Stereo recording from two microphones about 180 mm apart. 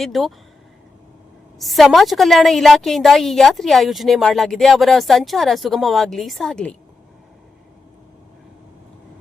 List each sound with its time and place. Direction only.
0.0 s a woman's voice: centre (ahead or behind)
1.5 s a woman's voice: centre (ahead or behind)